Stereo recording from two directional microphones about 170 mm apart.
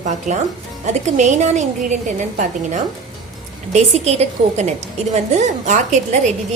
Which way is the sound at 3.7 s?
40° right (ahead or behind).